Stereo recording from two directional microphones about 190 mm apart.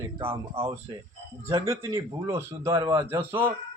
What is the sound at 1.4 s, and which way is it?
Speech, 15° right (ahead or behind).